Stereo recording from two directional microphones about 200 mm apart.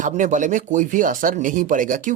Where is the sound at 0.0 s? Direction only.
40° right (ahead or behind).